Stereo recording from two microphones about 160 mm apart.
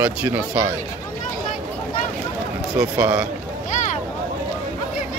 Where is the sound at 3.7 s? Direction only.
50° left (ahead or behind).